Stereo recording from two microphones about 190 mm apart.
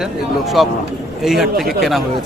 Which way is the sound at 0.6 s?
Centre (ahead or behind).